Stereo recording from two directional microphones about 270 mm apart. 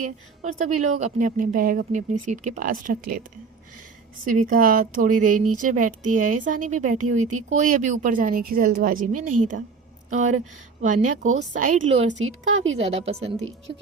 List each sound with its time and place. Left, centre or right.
0.0 s a woman's voice: right
4.3 s a woman's voice: right
9.0 s a woman's voice: right
10.1 s a woman's voice: right
12.1 s a woman's voice: right
12.7 s a woman's voice: right
13.7 s speech: right